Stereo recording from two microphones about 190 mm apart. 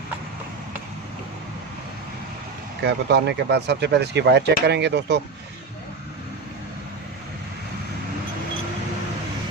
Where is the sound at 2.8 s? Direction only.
65° right (ahead or behind).